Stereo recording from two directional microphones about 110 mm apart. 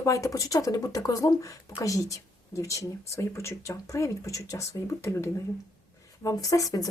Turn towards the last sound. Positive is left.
turn(degrees=35)  # may be behind; listen again after turning